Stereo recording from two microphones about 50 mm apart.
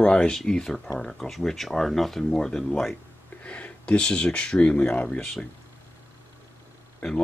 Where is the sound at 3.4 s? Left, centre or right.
Left.